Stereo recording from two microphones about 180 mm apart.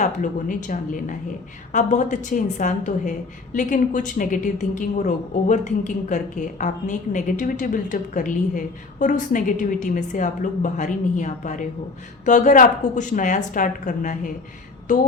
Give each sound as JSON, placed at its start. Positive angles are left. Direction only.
{"t": 0.0, "sound": "a woman's voice", "side_deg": 45}